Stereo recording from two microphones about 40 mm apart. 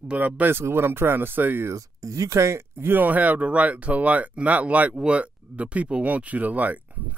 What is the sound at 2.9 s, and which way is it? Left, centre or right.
Speech, right.